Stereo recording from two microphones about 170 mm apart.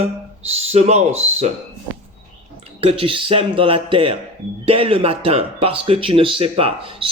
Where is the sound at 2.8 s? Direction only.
30° right (ahead or behind).